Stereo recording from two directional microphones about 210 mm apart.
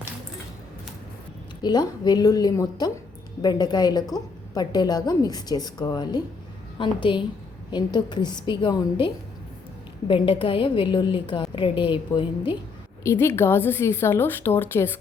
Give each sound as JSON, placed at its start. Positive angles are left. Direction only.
{"t": 1.6, "sound": "a woman's voice", "side_deg": 20}